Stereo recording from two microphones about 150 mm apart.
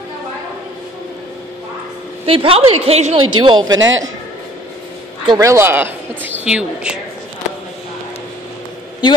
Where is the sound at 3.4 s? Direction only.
30° right (ahead or behind).